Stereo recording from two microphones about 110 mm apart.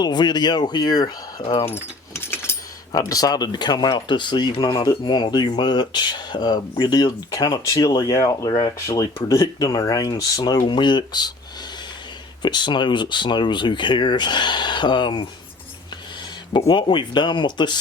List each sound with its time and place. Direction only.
0.0 s speech: 40° left (ahead or behind)
1.4 s speech: 55° left (ahead or behind)
1.7 s keys jangling: 20° left (ahead or behind)
2.9 s speech: 35° left (ahead or behind)
12.4 s speech: 45° left (ahead or behind)
16.6 s speech: 45° left (ahead or behind)